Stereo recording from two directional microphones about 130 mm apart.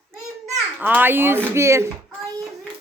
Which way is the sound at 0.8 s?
15° right (ahead or behind).